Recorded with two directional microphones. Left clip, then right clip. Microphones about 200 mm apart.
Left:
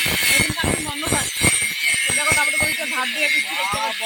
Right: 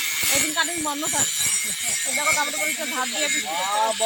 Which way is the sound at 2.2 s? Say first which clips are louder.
Even; 5° right (ahead or behind).